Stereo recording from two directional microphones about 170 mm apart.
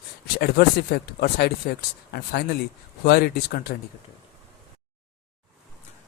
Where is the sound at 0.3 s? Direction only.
70° left (ahead or behind).